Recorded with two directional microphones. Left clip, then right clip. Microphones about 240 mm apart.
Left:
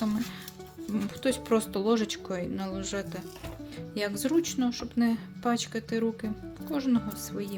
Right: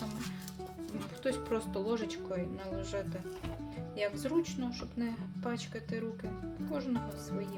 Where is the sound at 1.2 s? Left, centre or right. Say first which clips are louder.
Left 7 dB; left.